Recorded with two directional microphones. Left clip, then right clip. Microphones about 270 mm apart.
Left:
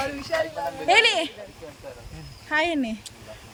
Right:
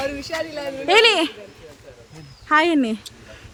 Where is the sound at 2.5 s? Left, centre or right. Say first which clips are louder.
Right 7 dB; centre.